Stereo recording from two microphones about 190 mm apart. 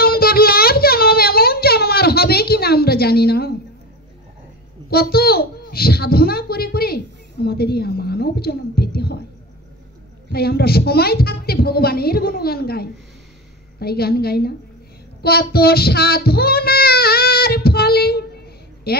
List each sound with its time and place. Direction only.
0.0 s a sound: 50° left (ahead or behind)
4.8 s a child's voice: 55° left (ahead or behind)
10.3 s a woman's voice: 55° left (ahead or behind)
15.2 s child singing: 55° left (ahead or behind)